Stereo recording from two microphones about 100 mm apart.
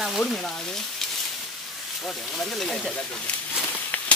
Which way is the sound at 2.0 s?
5° left (ahead or behind).